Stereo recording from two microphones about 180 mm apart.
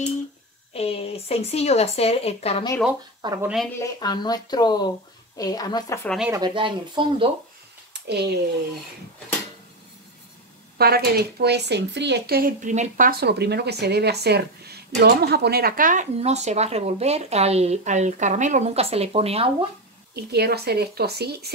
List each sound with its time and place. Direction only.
0.7 s speech: 35° left (ahead or behind)
3.2 s speech: 25° right (ahead or behind)
3.7 s speech: 20° left (ahead or behind)
6.0 s speech: centre (ahead or behind)
6.3 s speech: 25° right (ahead or behind)
7.9 s speech: 65° right (ahead or behind)
10.8 s speech: 60° right (ahead or behind); by 19.5 s 35° right (ahead or behind)
20.2 s speech: 60° right (ahead or behind)